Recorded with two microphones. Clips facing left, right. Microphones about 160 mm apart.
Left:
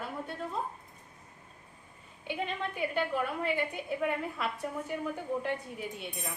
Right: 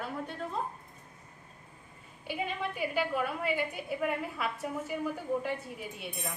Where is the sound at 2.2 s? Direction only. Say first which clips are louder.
Even; 5° right (ahead or behind).